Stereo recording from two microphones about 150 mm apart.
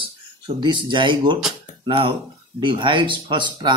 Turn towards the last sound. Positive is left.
turn(degrees=-35)  # may be behind; listen again after turning